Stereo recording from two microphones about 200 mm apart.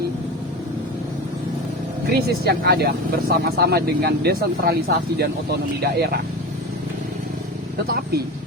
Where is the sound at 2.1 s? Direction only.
55° right (ahead or behind).